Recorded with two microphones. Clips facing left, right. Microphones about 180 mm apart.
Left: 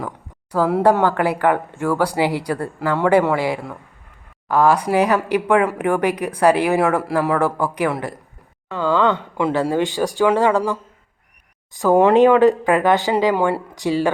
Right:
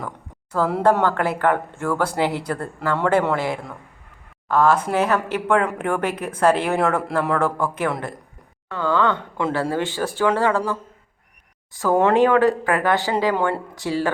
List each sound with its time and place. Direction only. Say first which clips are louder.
0.5 s speech: left 3 dB; 10° left (ahead or behind)
8.7 s speech: left 3 dB; 20° left (ahead or behind)